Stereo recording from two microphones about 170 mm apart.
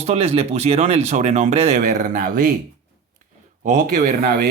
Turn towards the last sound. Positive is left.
turn(degrees=-50)  # may be behind; listen again after turning